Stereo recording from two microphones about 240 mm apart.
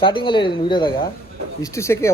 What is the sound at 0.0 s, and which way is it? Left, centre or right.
Speech, left.